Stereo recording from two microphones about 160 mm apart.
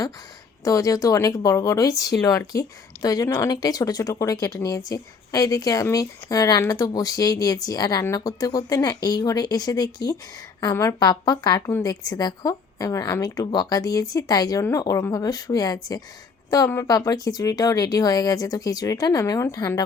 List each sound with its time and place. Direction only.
0.6 s speech: 20° left (ahead or behind)